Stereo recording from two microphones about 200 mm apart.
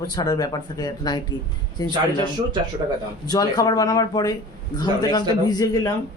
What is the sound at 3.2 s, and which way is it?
Speech, 20° left (ahead or behind).